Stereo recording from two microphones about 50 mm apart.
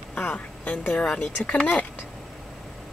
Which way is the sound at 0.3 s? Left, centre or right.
Left.